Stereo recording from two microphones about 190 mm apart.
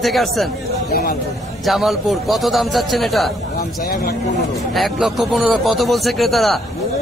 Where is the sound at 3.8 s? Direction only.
50° left (ahead or behind).